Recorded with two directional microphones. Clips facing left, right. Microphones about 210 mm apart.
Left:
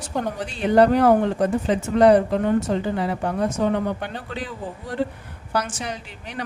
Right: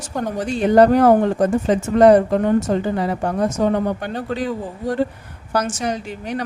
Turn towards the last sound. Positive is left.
turn(degrees=-45)  # may be behind; listen again after turning